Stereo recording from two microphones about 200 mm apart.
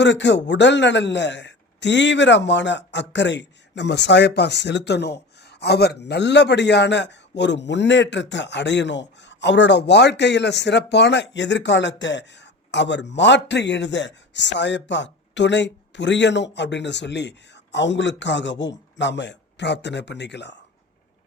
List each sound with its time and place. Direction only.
0.0 s a man's voice: 60° left (ahead or behind)